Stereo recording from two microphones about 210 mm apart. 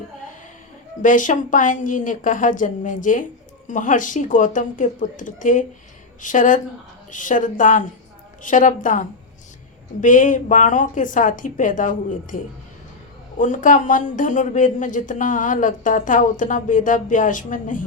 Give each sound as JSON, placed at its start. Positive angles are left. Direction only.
{"t": 1.0, "sound": "speech", "side_deg": 40}
{"t": 13.4, "sound": "speech", "side_deg": 35}